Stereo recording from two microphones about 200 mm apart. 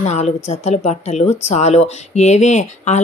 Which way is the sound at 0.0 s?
35° left (ahead or behind).